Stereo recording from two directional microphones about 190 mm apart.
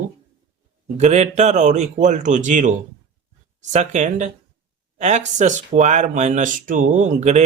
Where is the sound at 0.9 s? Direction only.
35° right (ahead or behind).